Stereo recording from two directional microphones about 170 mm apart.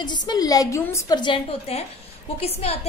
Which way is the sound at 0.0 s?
25° left (ahead or behind).